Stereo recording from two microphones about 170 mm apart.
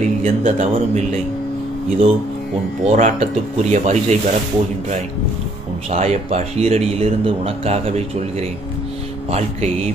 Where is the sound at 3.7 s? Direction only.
45° right (ahead or behind).